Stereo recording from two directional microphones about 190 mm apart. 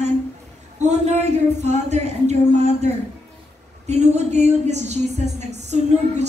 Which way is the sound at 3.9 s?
35° right (ahead or behind).